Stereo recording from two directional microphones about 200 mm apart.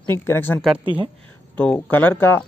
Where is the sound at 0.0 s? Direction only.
10° left (ahead or behind).